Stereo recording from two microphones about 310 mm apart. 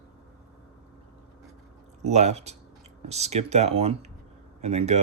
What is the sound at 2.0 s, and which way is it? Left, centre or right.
Speech, right.